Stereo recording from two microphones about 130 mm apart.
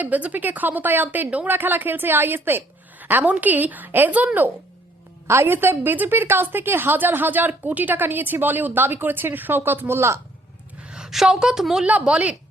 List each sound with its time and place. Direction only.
0.0 s a woman's voice: 10° right (ahead or behind)
10.8 s a woman's voice: 5° right (ahead or behind)